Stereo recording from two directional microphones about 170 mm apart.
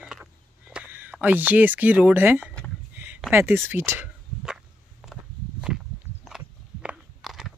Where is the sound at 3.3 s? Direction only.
15° right (ahead or behind).